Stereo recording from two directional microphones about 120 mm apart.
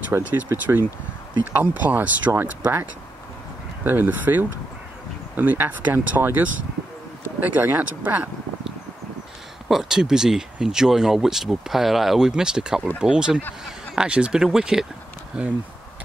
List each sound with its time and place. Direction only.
0.1 s speech: 15° right (ahead or behind)
9.7 s speech: 5° right (ahead or behind)